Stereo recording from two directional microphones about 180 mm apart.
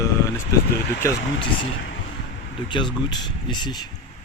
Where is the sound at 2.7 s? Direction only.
25° left (ahead or behind).